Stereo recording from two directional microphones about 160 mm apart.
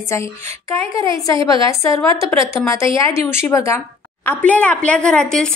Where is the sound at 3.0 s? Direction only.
15° left (ahead or behind).